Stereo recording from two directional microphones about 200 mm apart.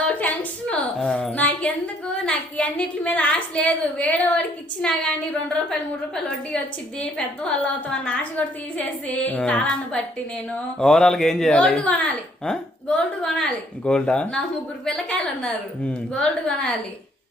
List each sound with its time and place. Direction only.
0.0 s a sound: 5° left (ahead or behind)
2.2 s a woman's voice: 5° left (ahead or behind)
7.0 s a woman's voice: 5° left (ahead or behind)
9.0 s music: 5° left (ahead or behind)
10.5 s a woman's voice: 5° left (ahead or behind)
13.2 s a woman's voice: 5° left (ahead or behind)